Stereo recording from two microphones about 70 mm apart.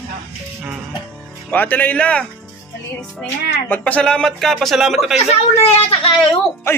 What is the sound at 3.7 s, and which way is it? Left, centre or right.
Music, centre.